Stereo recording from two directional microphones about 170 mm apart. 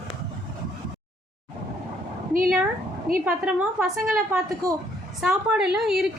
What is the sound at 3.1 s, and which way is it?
Speech, 55° right (ahead or behind).